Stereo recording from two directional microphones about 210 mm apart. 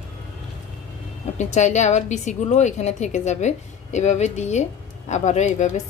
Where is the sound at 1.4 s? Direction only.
35° left (ahead or behind).